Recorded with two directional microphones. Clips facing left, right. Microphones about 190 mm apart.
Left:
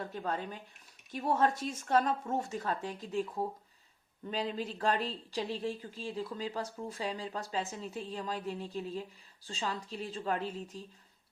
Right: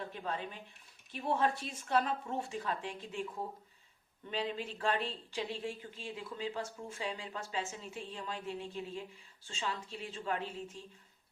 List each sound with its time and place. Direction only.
0.0 s speech: 45° left (ahead or behind)
4.3 s speech: 40° left (ahead or behind)